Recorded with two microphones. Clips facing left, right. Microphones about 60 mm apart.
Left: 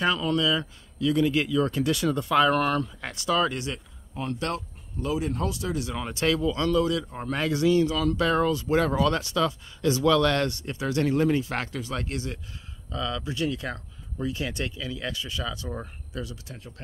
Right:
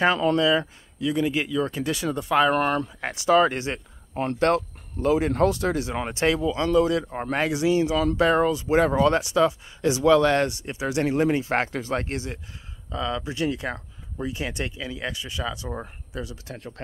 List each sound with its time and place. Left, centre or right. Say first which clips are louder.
0.0 s speech: right 4 dB; right
1.0 s speech: left 1 dB; centre; by 3.8 s right
4.1 s speech: right 8 dB; right
5.8 s speech: right 4 dB; right
7.4 s speech: left 1 dB; centre
8.5 s speech: right 2 dB; centre
8.7 s speech: right 5 dB; right
16.4 s speech: right 6 dB; right